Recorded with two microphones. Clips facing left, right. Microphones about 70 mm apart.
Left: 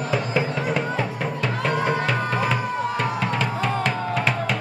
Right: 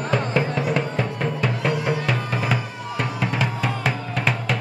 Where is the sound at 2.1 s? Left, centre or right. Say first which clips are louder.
Left 1 dB; centre.